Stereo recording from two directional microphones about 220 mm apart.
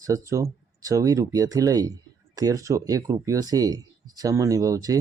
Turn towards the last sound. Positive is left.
turn(degrees=-15)  # may be behind; listen again after turning